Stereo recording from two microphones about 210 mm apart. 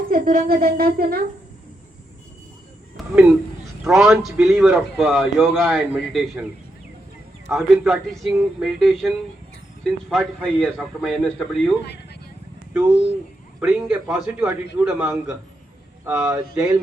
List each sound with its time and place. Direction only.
0.1 s a woman's voice: 45° right (ahead or behind)
3.0 s a sound: centre (ahead or behind)
3.8 s a man's voice: centre (ahead or behind)
7.5 s a man's voice: centre (ahead or behind)
12.7 s a man's voice: 5° right (ahead or behind)